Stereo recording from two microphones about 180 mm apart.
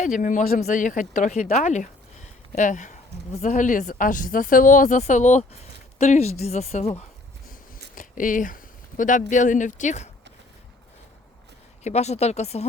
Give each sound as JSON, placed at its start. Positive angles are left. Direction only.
{"t": 0.0, "sound": "a woman's voice", "side_deg": 45}
{"t": 7.9, "sound": "a sound", "side_deg": 45}
{"t": 9.3, "sound": "speech", "side_deg": 45}
{"t": 11.8, "sound": "a woman's voice", "side_deg": 40}